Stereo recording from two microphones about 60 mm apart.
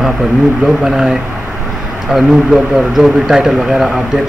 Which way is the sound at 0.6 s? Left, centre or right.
Centre.